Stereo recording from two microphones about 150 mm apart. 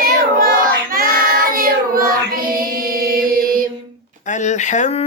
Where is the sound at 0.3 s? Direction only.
70° right (ahead or behind).